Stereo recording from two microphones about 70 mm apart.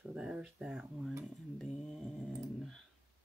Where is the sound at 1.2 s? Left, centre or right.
Centre.